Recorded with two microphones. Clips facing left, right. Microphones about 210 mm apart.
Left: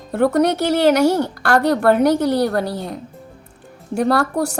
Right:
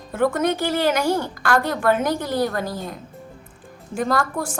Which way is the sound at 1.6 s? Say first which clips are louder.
Left 6 dB; 65° left (ahead or behind).